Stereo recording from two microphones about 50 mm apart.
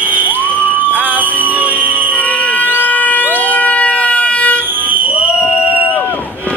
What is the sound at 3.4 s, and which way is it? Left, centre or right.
Vehicle, left.